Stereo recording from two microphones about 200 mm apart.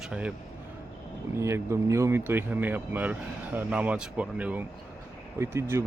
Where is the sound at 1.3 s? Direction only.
15° right (ahead or behind).